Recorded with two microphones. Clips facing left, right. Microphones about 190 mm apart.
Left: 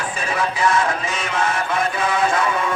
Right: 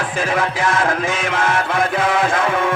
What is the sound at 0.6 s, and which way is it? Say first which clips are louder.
Music: left 1 dB; 90° right.